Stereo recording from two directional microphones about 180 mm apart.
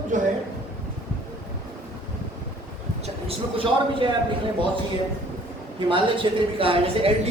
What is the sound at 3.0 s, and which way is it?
Speech, 30° right (ahead or behind).